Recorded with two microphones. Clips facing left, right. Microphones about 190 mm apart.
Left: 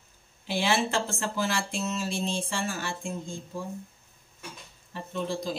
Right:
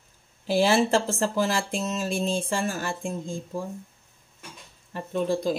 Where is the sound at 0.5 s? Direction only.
40° right (ahead or behind).